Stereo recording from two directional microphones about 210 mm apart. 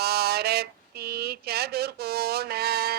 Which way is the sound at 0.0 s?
50° right (ahead or behind).